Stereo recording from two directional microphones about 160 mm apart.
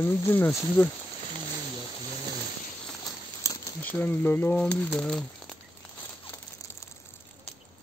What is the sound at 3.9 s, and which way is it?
Speech, 10° left (ahead or behind).